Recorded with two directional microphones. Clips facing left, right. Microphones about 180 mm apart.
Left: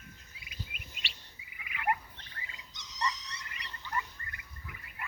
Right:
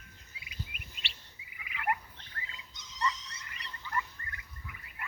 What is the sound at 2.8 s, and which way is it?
Frog, 75° left (ahead or behind).